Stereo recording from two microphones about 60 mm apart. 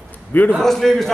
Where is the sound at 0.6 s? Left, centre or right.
Centre.